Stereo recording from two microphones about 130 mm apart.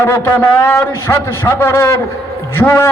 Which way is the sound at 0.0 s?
20° left (ahead or behind).